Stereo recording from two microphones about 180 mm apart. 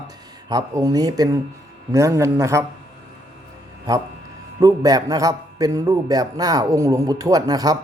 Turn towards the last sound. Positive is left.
turn(degrees=-20)  # may be behind; listen again after turning